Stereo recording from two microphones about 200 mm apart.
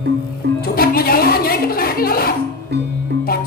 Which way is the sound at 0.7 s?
50° left (ahead or behind).